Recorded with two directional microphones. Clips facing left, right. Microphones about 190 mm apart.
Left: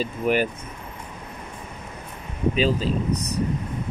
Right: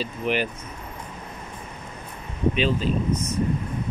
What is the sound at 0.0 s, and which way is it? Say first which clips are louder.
Speech: left 3 dB; 45° left (ahead or behind).